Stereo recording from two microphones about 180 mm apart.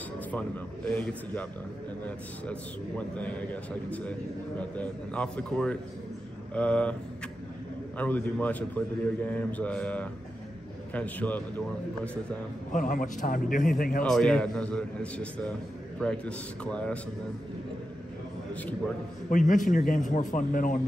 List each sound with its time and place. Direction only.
0.3 s a man's voice: 10° left (ahead or behind)
8.0 s a man's voice: 10° left (ahead or behind)
12.7 s a man's voice: 45° left (ahead or behind)
14.0 s a man's voice: 5° left (ahead or behind)
18.5 s a man's voice: 10° left (ahead or behind)
19.3 s a man's voice: 45° left (ahead or behind)